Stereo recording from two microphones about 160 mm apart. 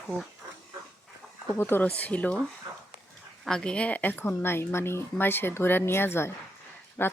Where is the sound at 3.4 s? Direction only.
5° left (ahead or behind).